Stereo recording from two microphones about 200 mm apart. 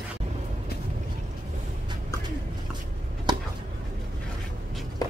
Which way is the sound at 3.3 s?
20° right (ahead or behind).